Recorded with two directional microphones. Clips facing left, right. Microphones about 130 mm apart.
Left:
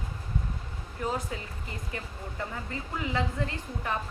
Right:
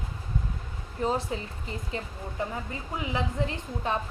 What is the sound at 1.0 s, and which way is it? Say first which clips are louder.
A woman's voice: right 4 dB; 25° right (ahead or behind).